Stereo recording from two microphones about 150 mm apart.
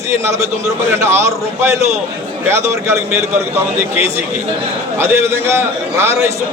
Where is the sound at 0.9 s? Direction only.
15° right (ahead or behind).